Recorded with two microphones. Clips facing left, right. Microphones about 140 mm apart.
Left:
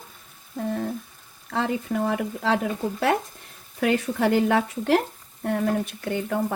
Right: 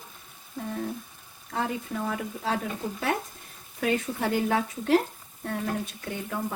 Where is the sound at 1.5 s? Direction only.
90° left.